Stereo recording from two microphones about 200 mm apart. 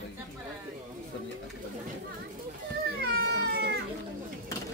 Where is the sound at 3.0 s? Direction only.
50° right (ahead or behind).